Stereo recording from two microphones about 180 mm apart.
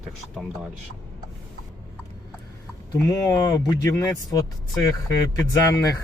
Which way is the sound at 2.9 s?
20° left (ahead or behind).